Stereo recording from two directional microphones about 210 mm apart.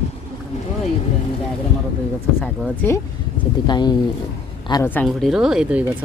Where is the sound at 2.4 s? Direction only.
10° left (ahead or behind).